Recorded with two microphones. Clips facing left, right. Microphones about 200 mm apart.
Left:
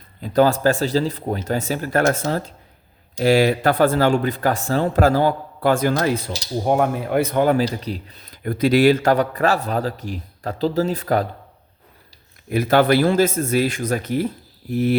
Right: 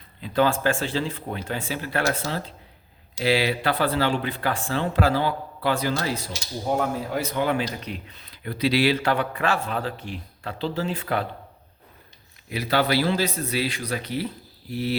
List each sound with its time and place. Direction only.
0.2 s speech: 40° left (ahead or behind)
12.5 s speech: 50° left (ahead or behind)